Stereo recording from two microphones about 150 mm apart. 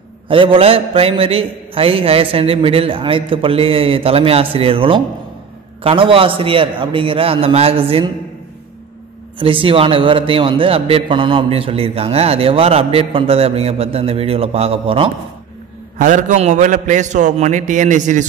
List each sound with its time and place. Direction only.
0.3 s a man's voice: 35° right (ahead or behind)
9.4 s a man's voice: 35° right (ahead or behind)
16.0 s a man's voice: 55° right (ahead or behind)